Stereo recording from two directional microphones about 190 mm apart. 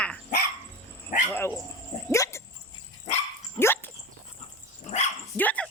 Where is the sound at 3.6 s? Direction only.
10° left (ahead or behind).